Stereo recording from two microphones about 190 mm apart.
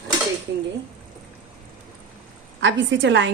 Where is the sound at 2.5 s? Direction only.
70° right (ahead or behind).